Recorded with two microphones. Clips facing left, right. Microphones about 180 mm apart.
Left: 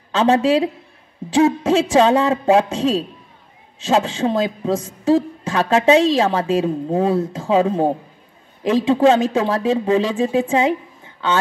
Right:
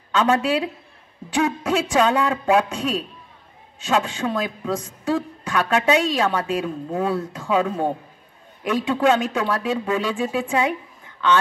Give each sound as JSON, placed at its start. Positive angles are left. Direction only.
{"t": 0.1, "sound": "speech", "side_deg": 25}